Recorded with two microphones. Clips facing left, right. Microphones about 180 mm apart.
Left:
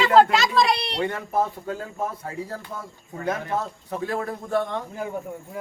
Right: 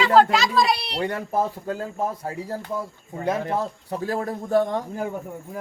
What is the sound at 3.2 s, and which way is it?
A man's voice, 30° right (ahead or behind).